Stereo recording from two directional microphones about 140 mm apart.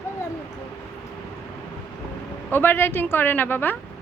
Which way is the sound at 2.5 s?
15° left (ahead or behind).